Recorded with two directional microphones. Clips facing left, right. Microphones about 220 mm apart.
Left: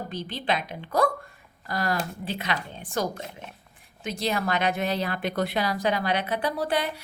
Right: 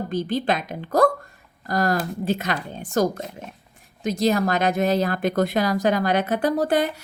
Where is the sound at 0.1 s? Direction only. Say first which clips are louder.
Right 6 dB; 45° right (ahead or behind).